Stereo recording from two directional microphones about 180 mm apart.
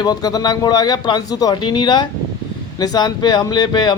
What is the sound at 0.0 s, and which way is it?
Speech, 20° left (ahead or behind).